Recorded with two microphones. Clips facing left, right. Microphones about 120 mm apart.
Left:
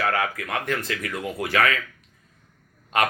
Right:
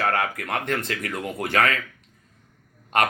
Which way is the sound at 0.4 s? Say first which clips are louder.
Right 1 dB; 25° right (ahead or behind).